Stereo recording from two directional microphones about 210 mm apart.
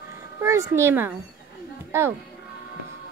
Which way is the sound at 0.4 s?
15° right (ahead or behind).